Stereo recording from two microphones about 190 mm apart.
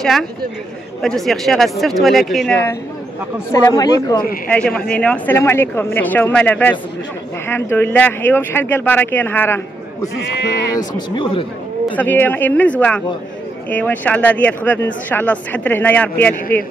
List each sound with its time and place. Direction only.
0.0 s speech: centre (ahead or behind)
3.5 s speech: 20° left (ahead or behind)
4.5 s speech: 5° left (ahead or behind)
10.8 s speech: 25° left (ahead or behind)
11.9 s speech: 10° left (ahead or behind)